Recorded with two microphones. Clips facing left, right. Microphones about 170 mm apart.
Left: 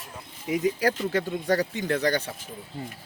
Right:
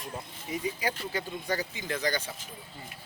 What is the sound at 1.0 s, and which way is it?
A man's voice, 70° left (ahead or behind).